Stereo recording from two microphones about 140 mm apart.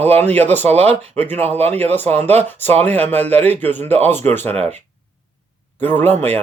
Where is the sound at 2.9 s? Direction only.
15° left (ahead or behind).